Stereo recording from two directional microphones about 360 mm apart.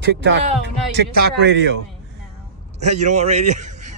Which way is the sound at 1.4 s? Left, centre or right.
Right.